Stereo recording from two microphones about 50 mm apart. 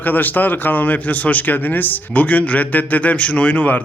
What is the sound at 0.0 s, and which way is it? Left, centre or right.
Speech, left.